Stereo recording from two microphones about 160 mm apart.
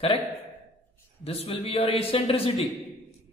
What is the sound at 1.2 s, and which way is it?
Speech, 40° left (ahead or behind).